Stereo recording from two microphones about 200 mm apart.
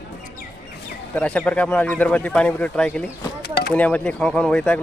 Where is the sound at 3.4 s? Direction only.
50° left (ahead or behind).